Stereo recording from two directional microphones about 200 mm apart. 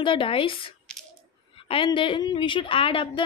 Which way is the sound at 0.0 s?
25° left (ahead or behind).